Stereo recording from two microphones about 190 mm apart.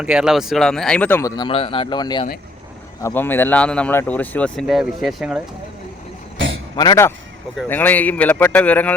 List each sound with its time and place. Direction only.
0.0 s speech: 5° right (ahead or behind)
1.4 s a man's voice: 30° left (ahead or behind)
3.0 s speech: 10° left (ahead or behind)
6.7 s speech: 20° left (ahead or behind)
7.5 s speech: 5° left (ahead or behind)